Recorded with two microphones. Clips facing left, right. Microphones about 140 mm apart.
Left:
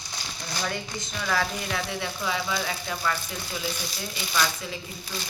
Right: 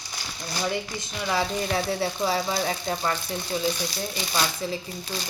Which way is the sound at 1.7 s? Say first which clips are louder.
Right 5 dB; 35° right (ahead or behind).